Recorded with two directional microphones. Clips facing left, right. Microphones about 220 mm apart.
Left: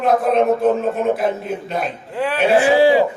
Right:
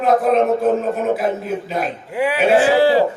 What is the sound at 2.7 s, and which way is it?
Speech, 15° left (ahead or behind).